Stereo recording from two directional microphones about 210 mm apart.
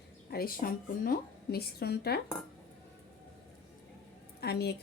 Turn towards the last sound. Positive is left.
turn(degrees=50)  # may be behind; listen again after turning